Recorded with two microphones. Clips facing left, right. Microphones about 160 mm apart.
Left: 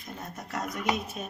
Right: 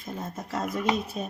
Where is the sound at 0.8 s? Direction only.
35° right (ahead or behind).